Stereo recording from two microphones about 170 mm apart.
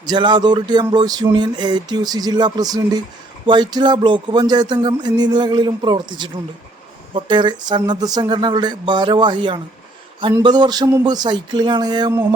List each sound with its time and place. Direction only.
0.0 s speech: 25° right (ahead or behind)